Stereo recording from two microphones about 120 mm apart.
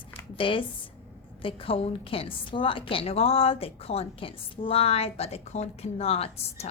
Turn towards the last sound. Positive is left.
turn(degrees=60)  # may be behind; listen again after turning